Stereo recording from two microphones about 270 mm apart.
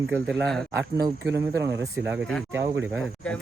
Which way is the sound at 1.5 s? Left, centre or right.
Centre.